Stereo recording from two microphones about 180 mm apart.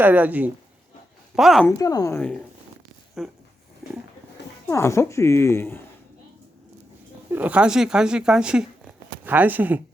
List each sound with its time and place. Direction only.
0.0 s a woman's voice: 10° right (ahead or behind)
1.6 s a woman's voice: 20° left (ahead or behind); by 3.3 s centre (ahead or behind)
4.7 s speech: 15° left (ahead or behind)
7.3 s speech: 10° right (ahead or behind)